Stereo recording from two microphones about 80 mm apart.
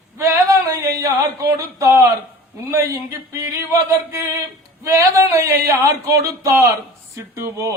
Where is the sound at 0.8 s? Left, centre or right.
Right.